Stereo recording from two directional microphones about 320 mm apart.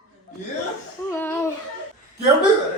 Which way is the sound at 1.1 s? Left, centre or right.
Centre.